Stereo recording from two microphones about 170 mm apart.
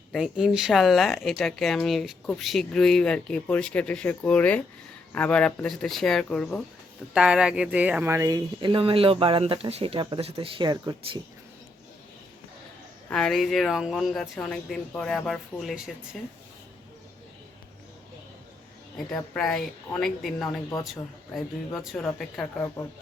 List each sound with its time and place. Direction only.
0.1 s speech: 5° right (ahead or behind); by 11.2 s 25° right (ahead or behind)
13.1 s speech: 5° left (ahead or behind)
18.9 s speech: 5° left (ahead or behind)